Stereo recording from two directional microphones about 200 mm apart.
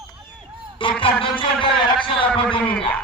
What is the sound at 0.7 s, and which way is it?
Music, 25° left (ahead or behind).